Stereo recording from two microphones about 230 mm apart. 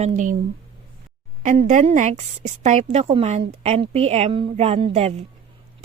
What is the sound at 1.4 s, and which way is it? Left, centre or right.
A woman's voice, right.